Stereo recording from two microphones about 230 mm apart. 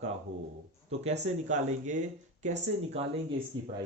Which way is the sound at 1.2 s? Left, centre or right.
Right.